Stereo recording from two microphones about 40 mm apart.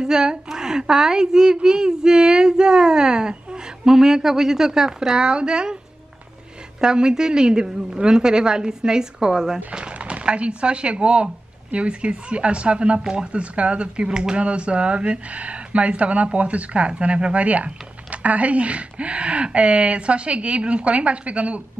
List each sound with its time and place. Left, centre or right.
0.0 s a woman's voice: centre
6.8 s a woman's voice: centre
9.7 s a woman's voice: right
14.4 s speech: right